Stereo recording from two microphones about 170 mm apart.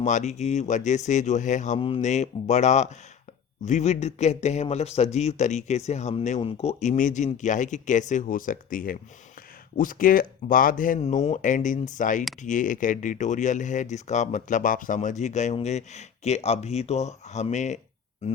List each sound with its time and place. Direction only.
0.0 s speech: 45° left (ahead or behind)